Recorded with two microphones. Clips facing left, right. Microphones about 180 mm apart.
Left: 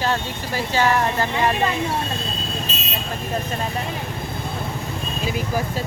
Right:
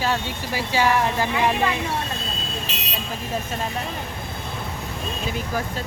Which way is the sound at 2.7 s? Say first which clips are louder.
Left 3 dB; 70° right (ahead or behind).